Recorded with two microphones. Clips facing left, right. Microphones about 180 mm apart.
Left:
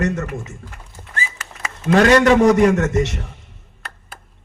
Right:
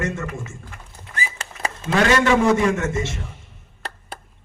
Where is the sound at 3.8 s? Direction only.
35° right (ahead or behind).